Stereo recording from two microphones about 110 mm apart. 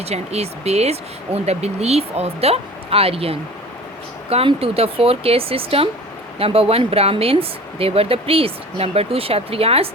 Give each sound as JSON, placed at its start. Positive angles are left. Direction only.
{"t": 0.0, "sound": "speech", "side_deg": -75}